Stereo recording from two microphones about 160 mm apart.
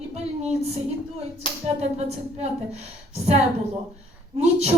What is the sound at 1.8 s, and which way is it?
Speech, 45° right (ahead or behind).